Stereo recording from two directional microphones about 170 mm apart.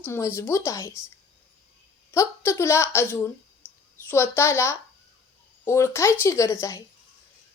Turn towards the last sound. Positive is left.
turn(degrees=15)  # may be behind; listen again after turning